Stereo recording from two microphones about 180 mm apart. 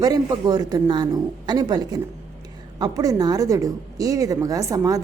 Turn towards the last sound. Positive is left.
turn(degrees=-20)  # may be behind; listen again after turning